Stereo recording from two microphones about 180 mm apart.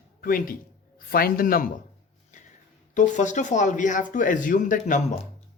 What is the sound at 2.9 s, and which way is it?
A man's voice, 40° left (ahead or behind).